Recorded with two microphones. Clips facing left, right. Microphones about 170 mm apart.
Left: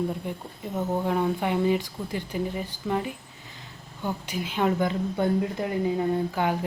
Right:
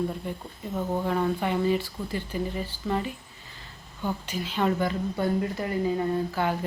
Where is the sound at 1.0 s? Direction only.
10° left (ahead or behind).